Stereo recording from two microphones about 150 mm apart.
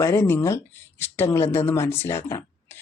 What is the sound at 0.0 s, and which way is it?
Speech, 15° left (ahead or behind).